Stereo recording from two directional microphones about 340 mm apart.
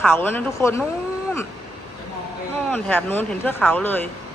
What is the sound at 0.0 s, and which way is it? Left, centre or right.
Speech, centre.